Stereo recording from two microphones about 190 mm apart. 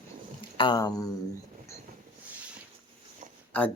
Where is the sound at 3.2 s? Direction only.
40° right (ahead or behind).